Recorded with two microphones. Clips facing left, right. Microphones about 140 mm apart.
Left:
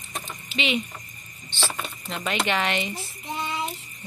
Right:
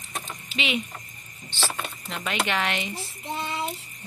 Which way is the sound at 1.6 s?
5° right (ahead or behind).